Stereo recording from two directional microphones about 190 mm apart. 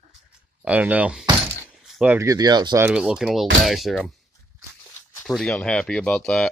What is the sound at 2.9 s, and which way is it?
Speech, 5° right (ahead or behind).